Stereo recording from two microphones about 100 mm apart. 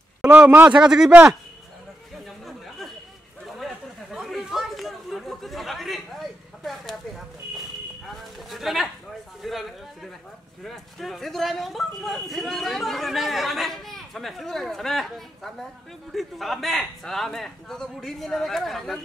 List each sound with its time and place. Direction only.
0.2 s a man's voice: 15° right (ahead or behind)
0.7 s speech: 5° right (ahead or behind)
2.2 s chatter: centre (ahead or behind)
6.6 s speech: centre (ahead or behind)
8.2 s speech: centre (ahead or behind)